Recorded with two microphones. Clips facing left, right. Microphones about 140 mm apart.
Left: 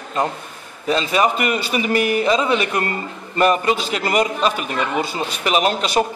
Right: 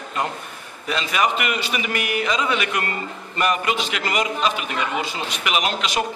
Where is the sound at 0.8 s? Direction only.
35° left (ahead or behind).